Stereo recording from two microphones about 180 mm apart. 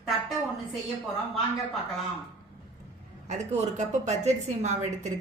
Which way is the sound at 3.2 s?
40° right (ahead or behind).